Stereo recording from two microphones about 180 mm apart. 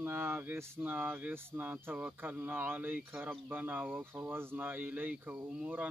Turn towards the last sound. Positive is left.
turn(degrees=-10)  # may be behind; listen again after turning